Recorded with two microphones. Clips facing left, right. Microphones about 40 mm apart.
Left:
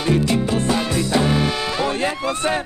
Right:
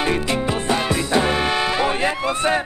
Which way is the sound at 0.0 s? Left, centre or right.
Right.